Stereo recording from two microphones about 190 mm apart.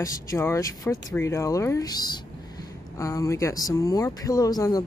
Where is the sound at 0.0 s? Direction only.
15° left (ahead or behind).